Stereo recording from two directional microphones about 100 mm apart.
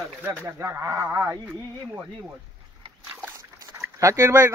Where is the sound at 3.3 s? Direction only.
30° right (ahead or behind).